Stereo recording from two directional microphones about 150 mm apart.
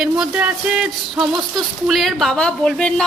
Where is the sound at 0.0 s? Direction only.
5° right (ahead or behind).